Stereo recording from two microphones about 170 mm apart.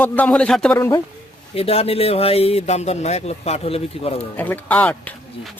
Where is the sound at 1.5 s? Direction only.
35° left (ahead or behind).